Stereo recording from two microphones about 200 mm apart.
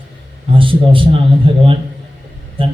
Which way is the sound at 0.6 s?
25° right (ahead or behind).